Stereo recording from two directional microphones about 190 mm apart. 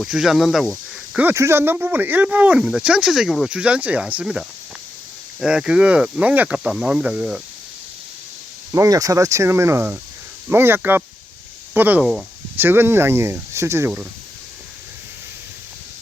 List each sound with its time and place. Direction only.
0.0 s speech: centre (ahead or behind)
1.2 s speech: 15° right (ahead or behind)
8.7 s speech: 15° right (ahead or behind)